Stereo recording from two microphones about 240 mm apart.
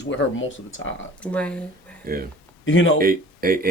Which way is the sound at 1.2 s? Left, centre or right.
Centre.